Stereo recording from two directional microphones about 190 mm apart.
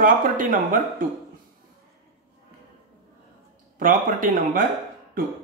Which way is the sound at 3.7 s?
45° right (ahead or behind).